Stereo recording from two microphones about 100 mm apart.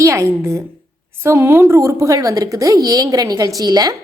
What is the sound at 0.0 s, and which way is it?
A woman's voice, 30° right (ahead or behind).